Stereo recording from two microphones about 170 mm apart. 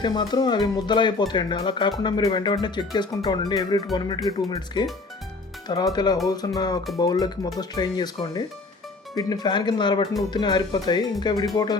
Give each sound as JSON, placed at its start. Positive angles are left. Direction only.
{"t": 0.0, "sound": "speech", "side_deg": 25}